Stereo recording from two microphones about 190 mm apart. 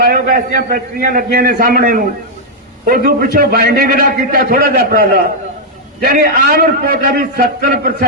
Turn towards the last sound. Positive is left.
turn(degrees=-50)  # may be behind; listen again after turning